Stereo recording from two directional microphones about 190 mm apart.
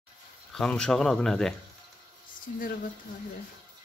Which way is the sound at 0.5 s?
5° left (ahead or behind).